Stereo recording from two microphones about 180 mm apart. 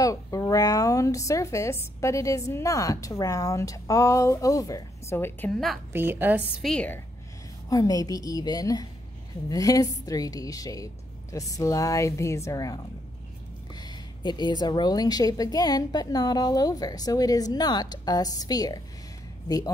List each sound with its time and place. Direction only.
0.0 s a woman's voice: 20° left (ahead or behind); by 5.8 s centre (ahead or behind)
5.9 s a woman's voice: 10° right (ahead or behind)
6.5 s a woman's voice: centre (ahead or behind)
7.7 s a woman's voice: 20° left (ahead or behind)